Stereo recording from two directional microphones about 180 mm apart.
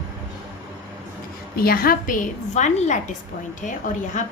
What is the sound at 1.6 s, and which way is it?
Speech, 55° left (ahead or behind).